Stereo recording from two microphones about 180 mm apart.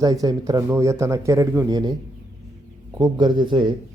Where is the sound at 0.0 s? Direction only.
20° right (ahead or behind).